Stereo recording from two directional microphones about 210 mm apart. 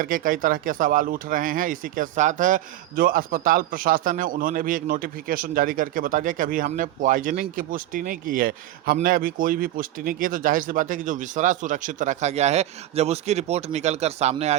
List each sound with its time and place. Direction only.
0.0 s speech: 40° right (ahead or behind)